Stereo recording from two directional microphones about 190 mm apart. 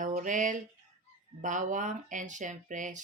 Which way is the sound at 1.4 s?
40° right (ahead or behind).